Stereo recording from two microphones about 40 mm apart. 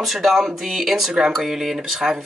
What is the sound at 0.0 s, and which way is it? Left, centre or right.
Speech, centre.